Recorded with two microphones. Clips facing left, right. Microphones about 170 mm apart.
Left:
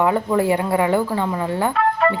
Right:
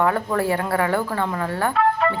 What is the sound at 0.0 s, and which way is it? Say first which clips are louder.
Speech: left 3 dB; 15° left (ahead or behind).